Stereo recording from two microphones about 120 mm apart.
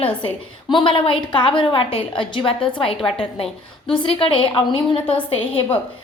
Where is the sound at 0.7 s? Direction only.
45° left (ahead or behind).